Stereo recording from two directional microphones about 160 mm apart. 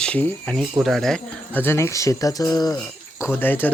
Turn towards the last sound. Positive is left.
turn(degrees=10)  # may be behind; listen again after turning